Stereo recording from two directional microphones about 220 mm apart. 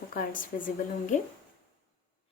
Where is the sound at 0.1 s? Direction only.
40° left (ahead or behind).